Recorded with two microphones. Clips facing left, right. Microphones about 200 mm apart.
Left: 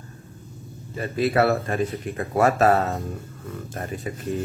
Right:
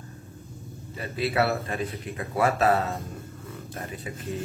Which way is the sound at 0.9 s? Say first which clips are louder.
Left 5 dB; 45° left (ahead or behind).